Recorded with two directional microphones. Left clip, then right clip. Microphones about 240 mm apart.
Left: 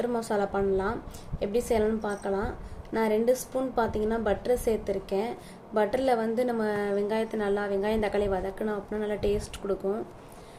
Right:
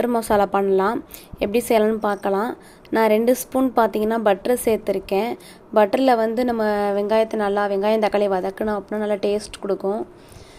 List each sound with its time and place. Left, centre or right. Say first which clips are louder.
0.0 s a woman's voice: right 9 dB; right